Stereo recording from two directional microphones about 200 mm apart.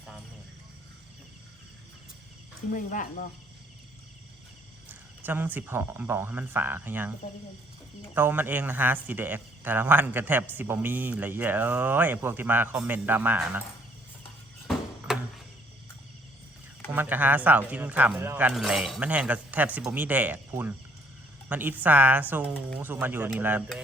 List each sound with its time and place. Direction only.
2.7 s speech: 40° left (ahead or behind)
5.2 s speech: 10° right (ahead or behind)
8.1 s speech: 10° right (ahead or behind)
14.7 s a sound: centre (ahead or behind)
16.9 s speech: 10° right (ahead or behind)